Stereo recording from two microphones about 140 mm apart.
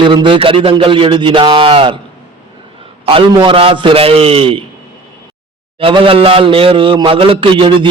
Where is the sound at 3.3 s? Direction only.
35° right (ahead or behind).